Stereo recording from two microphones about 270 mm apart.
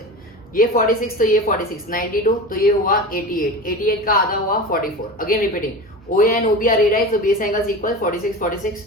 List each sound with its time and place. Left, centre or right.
0.5 s a woman's voice: left